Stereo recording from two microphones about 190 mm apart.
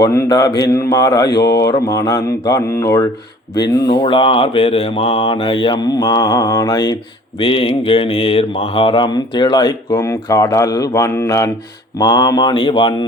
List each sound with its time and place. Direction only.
0.0 s mantra: 15° left (ahead or behind)
1.5 s speech: 15° left (ahead or behind)
3.5 s mantra: 20° left (ahead or behind)